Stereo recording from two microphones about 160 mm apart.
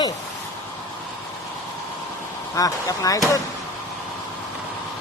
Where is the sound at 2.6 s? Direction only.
20° left (ahead or behind).